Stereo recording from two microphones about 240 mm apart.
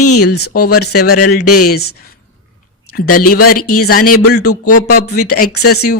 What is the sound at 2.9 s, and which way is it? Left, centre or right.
Speech, left.